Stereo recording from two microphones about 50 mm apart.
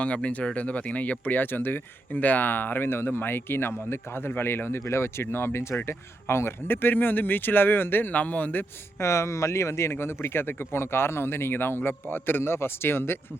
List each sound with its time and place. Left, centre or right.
0.0 s speech: left
9.0 s speech: left
9.9 s speech: left